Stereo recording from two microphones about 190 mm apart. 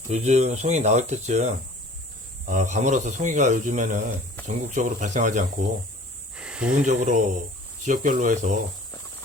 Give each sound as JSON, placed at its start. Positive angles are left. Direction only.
{"t": 0.1, "sound": "speech", "side_deg": -35}
{"t": 6.3, "sound": "snake", "side_deg": -5}
{"t": 6.8, "sound": "speech", "side_deg": -40}